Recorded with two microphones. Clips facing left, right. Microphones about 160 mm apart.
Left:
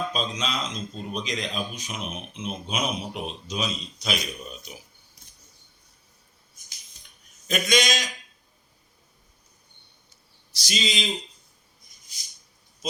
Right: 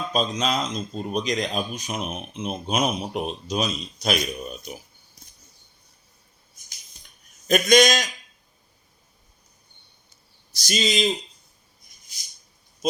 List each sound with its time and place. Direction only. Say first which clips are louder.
0.1 s speech: right 5 dB; 45° right (ahead or behind)
7.4 s speech: right 7 dB; 45° right (ahead or behind)
10.5 s speech: right 5 dB; 50° right (ahead or behind)
12.8 s speech: right 8 dB; 50° right (ahead or behind)